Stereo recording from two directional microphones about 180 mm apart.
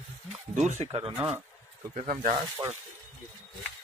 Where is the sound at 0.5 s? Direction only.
40° right (ahead or behind).